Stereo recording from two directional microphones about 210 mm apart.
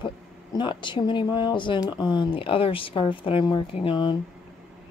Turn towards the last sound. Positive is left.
turn(degrees=25)  # may be behind; listen again after turning